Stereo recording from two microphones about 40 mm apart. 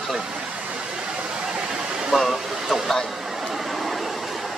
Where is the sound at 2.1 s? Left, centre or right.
Centre.